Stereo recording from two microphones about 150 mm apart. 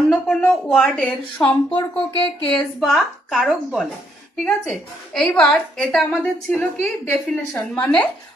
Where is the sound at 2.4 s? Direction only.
5° left (ahead or behind).